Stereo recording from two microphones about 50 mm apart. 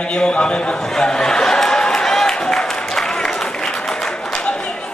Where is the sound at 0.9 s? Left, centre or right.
Centre.